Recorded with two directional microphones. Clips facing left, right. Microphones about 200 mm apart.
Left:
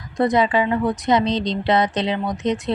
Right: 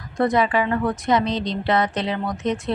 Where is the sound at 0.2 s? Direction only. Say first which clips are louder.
Left 2 dB; 20° left (ahead or behind).